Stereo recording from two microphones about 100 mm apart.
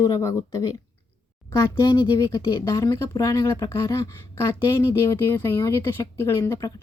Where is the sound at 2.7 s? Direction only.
30° left (ahead or behind).